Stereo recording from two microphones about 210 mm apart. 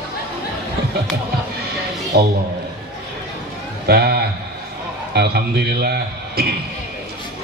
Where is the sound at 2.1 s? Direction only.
50° right (ahead or behind).